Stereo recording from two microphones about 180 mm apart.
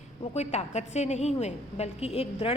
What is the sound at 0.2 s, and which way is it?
A woman's voice, 35° left (ahead or behind).